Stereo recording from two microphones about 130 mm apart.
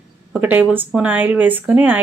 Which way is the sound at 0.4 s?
15° right (ahead or behind).